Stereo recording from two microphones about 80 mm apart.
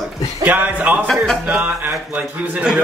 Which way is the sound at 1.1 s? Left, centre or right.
Centre.